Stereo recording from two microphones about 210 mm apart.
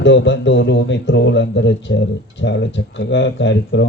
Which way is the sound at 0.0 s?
60° left (ahead or behind).